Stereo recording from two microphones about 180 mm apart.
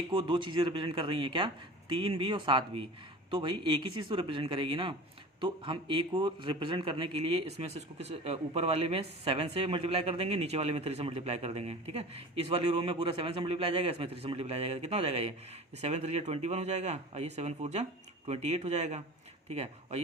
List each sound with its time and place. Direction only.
0.1 s a man's voice: 25° right (ahead or behind)